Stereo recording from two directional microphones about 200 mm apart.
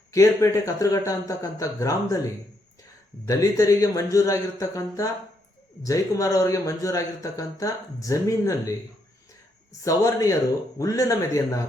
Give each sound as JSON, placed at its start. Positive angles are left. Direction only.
{"t": 0.1, "sound": "speech", "side_deg": 15}
{"t": 3.2, "sound": "speech", "side_deg": 15}
{"t": 9.8, "sound": "speech", "side_deg": 15}